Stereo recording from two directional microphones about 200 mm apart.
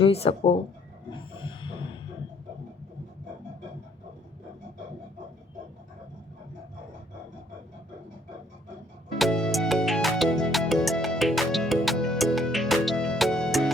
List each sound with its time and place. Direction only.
0.0 s speech: 30° left (ahead or behind)
1.4 s heart murmur: 25° left (ahead or behind)
9.1 s music: centre (ahead or behind)